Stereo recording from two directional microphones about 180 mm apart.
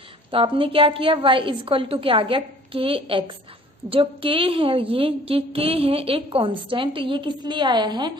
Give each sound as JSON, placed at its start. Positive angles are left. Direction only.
{"t": 0.3, "sound": "a woman's voice", "side_deg": -30}